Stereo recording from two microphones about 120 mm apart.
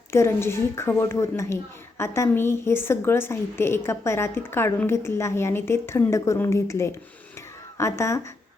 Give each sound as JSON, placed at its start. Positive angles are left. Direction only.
{"t": 0.1, "sound": "a woman's voice", "side_deg": 20}